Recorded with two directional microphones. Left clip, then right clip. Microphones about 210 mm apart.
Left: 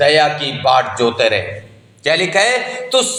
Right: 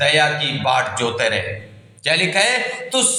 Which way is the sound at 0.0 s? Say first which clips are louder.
Left 4 dB; 15° left (ahead or behind).